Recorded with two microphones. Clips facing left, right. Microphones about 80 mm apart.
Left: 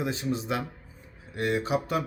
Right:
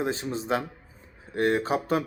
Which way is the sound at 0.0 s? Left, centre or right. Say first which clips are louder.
Right 1 dB; right.